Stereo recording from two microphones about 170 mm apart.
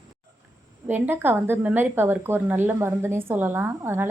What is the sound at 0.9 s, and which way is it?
A woman's voice, 10° right (ahead or behind).